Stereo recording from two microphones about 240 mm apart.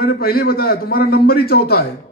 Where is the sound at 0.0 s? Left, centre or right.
Left.